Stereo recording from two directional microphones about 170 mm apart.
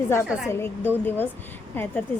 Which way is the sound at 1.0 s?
10° left (ahead or behind).